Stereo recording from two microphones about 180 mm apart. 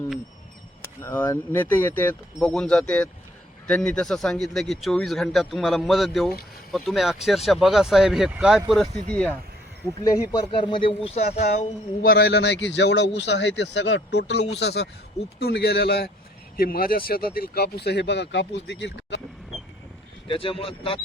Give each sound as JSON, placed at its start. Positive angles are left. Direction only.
{"t": 1.0, "sound": "speech", "side_deg": 15}
{"t": 10.0, "sound": "speech", "side_deg": 20}
{"t": 12.0, "sound": "speech", "side_deg": 60}
{"t": 20.2, "sound": "speech", "side_deg": 30}